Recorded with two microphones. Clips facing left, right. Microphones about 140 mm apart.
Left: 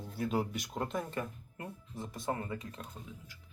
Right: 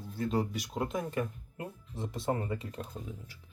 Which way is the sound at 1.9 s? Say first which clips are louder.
Right 4 dB; 25° right (ahead or behind).